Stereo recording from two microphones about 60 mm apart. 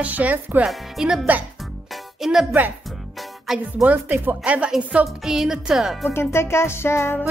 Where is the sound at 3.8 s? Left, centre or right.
Right.